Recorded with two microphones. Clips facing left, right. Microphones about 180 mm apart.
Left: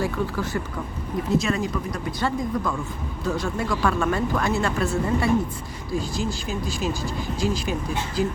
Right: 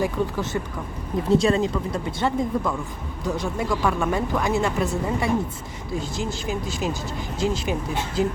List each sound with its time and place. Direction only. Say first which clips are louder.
0.0 s speech: right 1 dB; 20° right (ahead or behind)
1.4 s speech: right 4 dB; 30° right (ahead or behind)